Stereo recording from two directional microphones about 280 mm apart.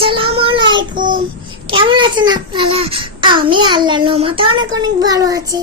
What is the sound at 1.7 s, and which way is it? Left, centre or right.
A child's voice, centre.